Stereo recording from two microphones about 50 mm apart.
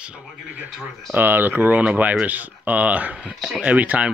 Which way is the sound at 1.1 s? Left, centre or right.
Right.